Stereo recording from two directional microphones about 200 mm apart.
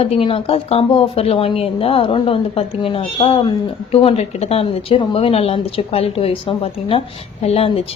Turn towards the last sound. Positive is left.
turn(degrees=30)  # may be behind; listen again after turning